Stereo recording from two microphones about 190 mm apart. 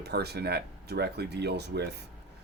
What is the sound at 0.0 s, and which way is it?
Speech, 60° right (ahead or behind).